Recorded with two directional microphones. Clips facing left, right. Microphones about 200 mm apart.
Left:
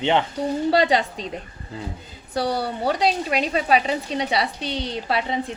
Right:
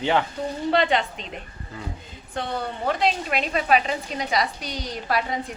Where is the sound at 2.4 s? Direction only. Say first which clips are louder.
Left 5 dB; 35° left (ahead or behind).